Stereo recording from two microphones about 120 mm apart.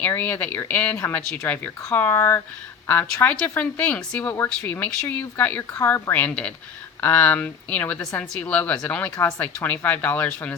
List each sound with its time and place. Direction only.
0.0 s speech: 15° left (ahead or behind)